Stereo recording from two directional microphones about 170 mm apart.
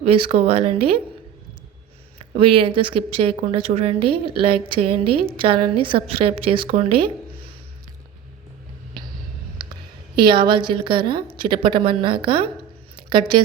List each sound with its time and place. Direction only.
0.0 s speech: 35° right (ahead or behind)
2.1 s speech: 30° right (ahead or behind)
10.2 s a woman's voice: 30° right (ahead or behind)